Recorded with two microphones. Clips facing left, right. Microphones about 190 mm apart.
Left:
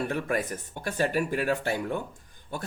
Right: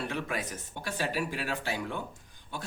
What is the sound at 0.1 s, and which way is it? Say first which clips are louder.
Speech: left 6 dB; 50° left (ahead or behind).